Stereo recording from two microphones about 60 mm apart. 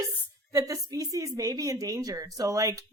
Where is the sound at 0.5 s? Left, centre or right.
Right.